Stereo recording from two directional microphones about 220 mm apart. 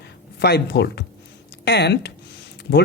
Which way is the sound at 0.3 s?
45° left (ahead or behind).